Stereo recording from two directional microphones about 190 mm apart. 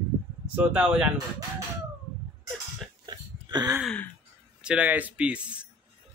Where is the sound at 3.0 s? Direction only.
20° right (ahead or behind).